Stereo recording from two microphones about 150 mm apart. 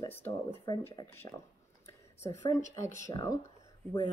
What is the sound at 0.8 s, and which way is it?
Speech, 15° left (ahead or behind).